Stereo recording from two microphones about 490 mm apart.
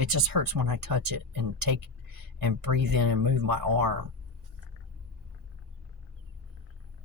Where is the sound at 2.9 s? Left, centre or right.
Right.